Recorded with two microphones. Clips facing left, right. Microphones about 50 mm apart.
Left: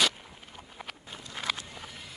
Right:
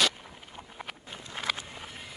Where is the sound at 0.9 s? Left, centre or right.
Centre.